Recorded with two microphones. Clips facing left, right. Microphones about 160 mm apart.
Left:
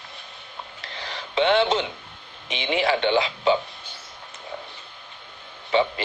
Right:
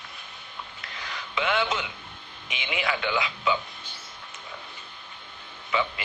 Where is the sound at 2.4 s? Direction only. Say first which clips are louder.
Left 7 dB; 30° left (ahead or behind).